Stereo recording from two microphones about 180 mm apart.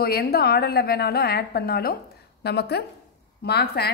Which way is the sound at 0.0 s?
60° left (ahead or behind).